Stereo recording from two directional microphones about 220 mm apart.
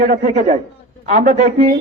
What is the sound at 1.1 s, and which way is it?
Speech, 45° right (ahead or behind).